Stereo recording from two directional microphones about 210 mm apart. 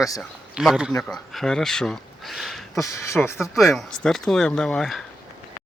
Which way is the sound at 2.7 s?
15° left (ahead or behind).